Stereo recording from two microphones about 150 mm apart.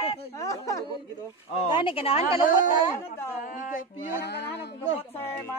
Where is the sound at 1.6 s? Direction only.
35° left (ahead or behind).